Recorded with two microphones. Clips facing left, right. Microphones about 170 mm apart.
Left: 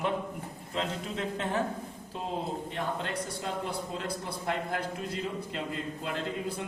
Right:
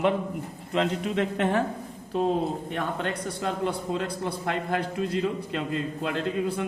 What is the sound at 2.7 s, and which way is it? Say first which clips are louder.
A man's voice: right 4 dB; 65° right (ahead or behind).